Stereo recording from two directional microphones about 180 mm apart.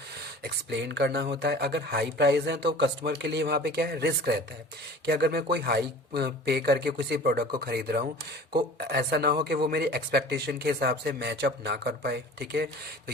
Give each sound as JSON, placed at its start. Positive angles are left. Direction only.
{"t": 0.4, "sound": "speech", "side_deg": -75}